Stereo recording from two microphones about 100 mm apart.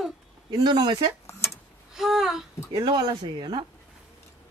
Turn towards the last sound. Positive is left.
turn(degrees=-45)  # may be behind; listen again after turning